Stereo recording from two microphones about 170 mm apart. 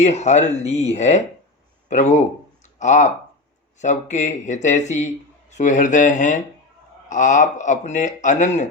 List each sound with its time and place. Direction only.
0.0 s speech: 40° left (ahead or behind)